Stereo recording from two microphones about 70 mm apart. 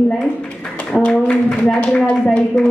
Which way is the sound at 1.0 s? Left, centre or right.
Centre.